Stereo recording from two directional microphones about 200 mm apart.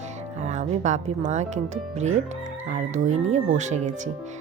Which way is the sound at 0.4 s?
35° right (ahead or behind).